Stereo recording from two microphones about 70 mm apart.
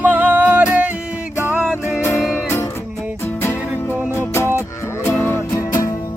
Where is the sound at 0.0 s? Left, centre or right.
Right.